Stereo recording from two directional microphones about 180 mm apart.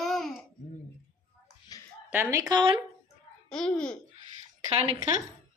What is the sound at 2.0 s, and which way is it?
Speech, 10° right (ahead or behind).